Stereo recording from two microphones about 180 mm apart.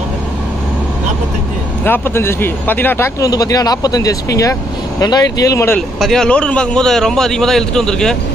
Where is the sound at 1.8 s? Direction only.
10° left (ahead or behind).